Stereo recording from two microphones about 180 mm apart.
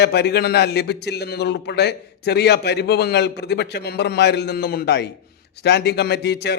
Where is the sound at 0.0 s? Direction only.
65° left (ahead or behind).